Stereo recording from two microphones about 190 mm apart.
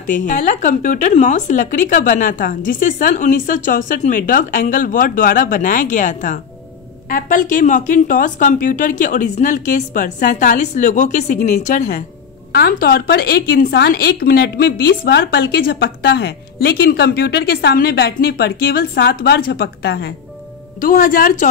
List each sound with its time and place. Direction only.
0.0 s a woman's voice: 45° left (ahead or behind)
12.5 s speech: 55° left (ahead or behind)
20.8 s a woman's voice: 45° left (ahead or behind)